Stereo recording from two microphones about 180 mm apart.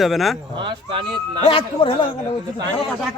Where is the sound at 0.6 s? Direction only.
25° right (ahead or behind).